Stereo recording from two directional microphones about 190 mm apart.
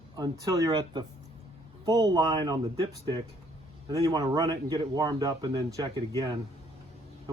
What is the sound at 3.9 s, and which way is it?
Speech, 20° right (ahead or behind).